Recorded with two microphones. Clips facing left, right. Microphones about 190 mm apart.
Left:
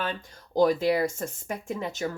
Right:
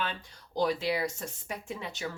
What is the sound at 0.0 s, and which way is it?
Speech, 45° left (ahead or behind).